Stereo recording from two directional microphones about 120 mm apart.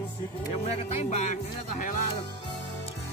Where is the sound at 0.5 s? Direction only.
60° left (ahead or behind); by 1.9 s 90° left.